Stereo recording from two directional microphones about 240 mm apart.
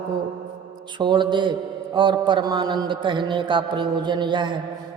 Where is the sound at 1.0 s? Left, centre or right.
Centre.